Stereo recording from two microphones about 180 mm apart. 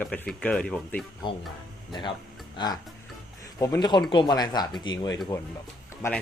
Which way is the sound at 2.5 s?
25° left (ahead or behind).